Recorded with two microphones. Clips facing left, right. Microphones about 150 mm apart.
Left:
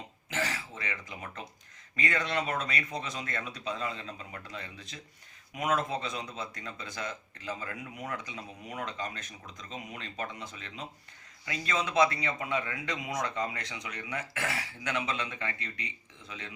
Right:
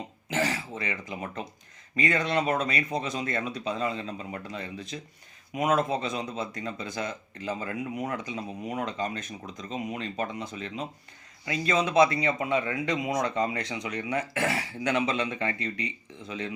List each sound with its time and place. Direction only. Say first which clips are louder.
0.3 s speech: right 6 dB; 20° right (ahead or behind)